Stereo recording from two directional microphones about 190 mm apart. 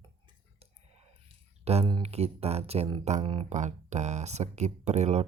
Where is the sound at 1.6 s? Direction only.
30° right (ahead or behind).